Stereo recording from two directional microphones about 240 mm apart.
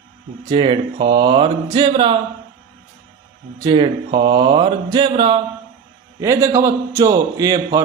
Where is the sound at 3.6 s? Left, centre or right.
Centre.